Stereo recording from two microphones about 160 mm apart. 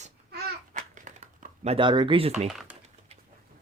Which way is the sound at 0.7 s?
55° right (ahead or behind).